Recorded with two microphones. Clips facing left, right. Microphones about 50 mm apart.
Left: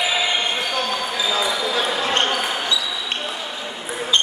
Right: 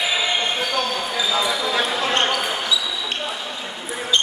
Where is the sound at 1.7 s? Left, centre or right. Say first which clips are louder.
Even; centre.